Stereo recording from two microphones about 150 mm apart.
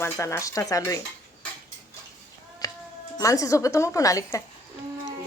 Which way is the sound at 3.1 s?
20° left (ahead or behind).